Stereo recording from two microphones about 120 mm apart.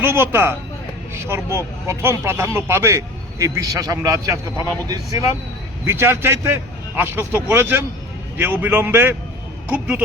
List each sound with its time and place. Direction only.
0.0 s speech: 20° right (ahead or behind)
5.8 s a man's voice: 20° right (ahead or behind)